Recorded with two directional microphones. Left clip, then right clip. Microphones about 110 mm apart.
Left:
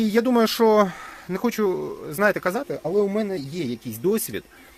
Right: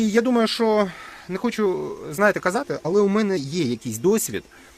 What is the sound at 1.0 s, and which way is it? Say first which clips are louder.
Speech: left 1 dB; 5° left (ahead or behind).